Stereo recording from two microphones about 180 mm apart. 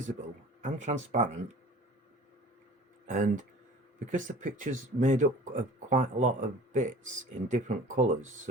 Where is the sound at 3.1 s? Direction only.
45° right (ahead or behind).